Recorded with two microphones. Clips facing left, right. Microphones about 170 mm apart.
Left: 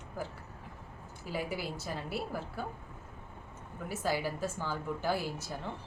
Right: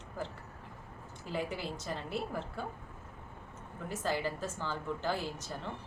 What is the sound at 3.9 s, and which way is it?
A woman's voice, 10° left (ahead or behind).